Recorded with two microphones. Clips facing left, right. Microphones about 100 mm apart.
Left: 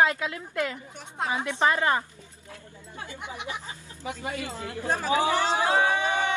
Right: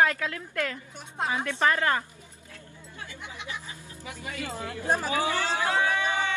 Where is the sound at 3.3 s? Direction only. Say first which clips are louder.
Left 1 dB; 20° left (ahead or behind).